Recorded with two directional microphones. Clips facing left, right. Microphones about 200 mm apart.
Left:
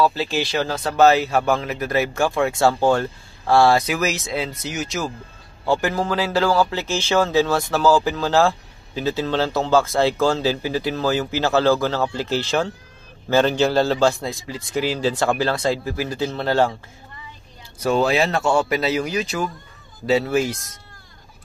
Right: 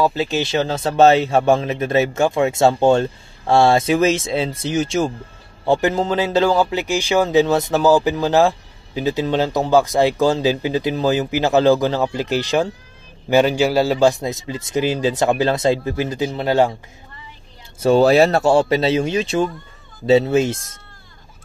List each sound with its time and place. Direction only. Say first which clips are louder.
0.0 s speech: right 2 dB; 20° right (ahead or behind)
17.7 s speech: right 6 dB; 30° right (ahead or behind)